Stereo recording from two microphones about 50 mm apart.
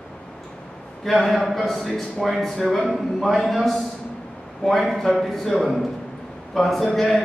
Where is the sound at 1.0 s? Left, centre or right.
Centre.